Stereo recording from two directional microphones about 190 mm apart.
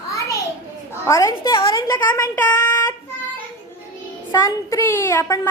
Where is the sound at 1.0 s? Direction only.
15° left (ahead or behind).